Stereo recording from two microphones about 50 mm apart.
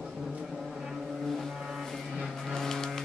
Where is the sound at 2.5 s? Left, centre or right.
Centre.